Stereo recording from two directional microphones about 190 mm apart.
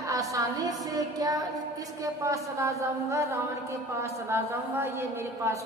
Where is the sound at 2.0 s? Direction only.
15° right (ahead or behind).